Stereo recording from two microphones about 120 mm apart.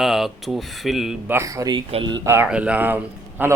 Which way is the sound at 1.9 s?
45° right (ahead or behind).